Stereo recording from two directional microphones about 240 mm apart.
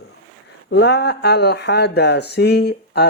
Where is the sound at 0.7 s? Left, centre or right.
Left.